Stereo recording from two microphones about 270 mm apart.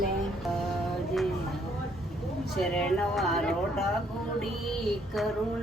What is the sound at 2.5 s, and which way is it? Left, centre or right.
Music, centre.